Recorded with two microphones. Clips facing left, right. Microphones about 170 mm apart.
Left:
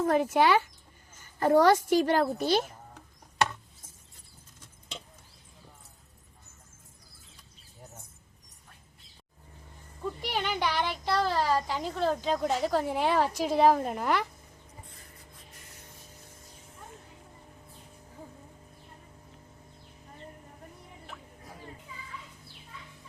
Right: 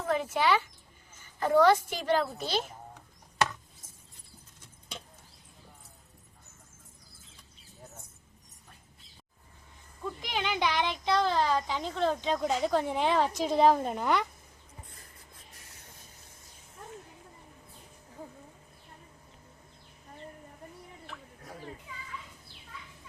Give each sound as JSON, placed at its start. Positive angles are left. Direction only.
{"t": 0.0, "sound": "a child's voice", "side_deg": 50}
{"t": 10.0, "sound": "a sound", "side_deg": 10}
{"t": 10.6, "sound": "speech", "side_deg": 10}